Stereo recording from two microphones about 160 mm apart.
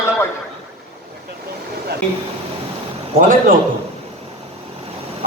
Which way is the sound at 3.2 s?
55° right (ahead or behind).